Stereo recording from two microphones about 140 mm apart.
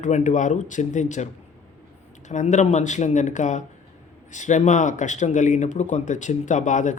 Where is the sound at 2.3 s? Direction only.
55° left (ahead or behind).